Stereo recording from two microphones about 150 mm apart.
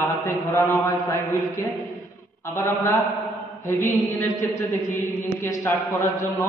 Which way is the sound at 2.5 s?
15° left (ahead or behind).